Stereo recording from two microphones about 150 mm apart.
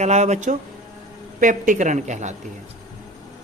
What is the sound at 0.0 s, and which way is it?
A woman's voice, 50° right (ahead or behind).